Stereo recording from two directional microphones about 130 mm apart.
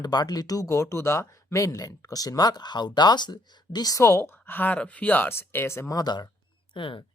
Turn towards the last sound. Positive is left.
turn(degrees=40)  # may be behind; listen again after turning